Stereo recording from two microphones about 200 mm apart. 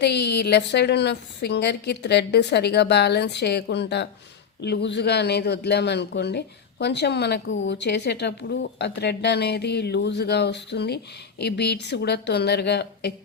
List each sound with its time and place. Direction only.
0.0 s speech: 55° left (ahead or behind)